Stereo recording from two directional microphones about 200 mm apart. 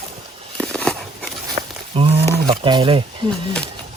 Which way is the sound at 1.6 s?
25° right (ahead or behind).